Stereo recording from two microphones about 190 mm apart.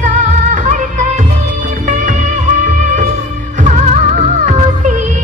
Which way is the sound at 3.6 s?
40° right (ahead or behind).